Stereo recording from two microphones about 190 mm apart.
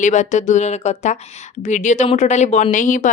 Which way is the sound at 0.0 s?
40° left (ahead or behind).